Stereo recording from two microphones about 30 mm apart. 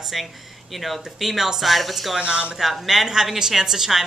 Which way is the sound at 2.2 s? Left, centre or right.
Right.